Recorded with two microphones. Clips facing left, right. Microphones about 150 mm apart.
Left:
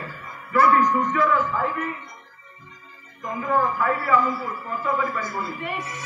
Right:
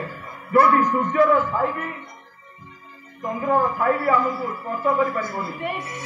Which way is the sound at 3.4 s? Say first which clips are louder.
Right 2 dB; 50° right (ahead or behind).